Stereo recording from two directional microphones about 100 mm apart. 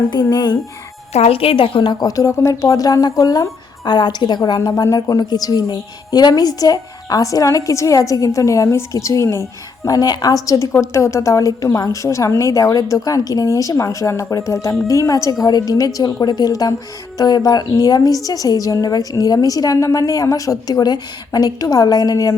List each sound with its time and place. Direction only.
0.1 s a woman's voice: 45° left (ahead or behind)
1.1 s a woman's voice: 80° left; by 22.4 s 35° left (ahead or behind)